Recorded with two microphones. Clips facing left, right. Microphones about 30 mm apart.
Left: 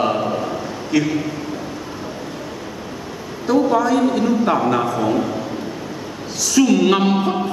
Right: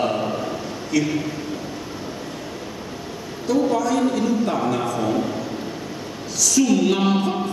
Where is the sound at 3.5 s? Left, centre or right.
Left.